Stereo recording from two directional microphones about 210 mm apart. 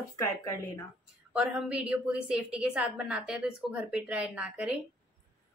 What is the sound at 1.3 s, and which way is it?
A woman's voice, 5° right (ahead or behind).